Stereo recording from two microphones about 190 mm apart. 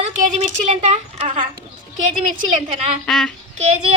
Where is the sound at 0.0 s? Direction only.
35° right (ahead or behind).